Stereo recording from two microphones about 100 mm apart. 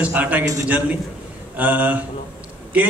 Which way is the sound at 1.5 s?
15° right (ahead or behind).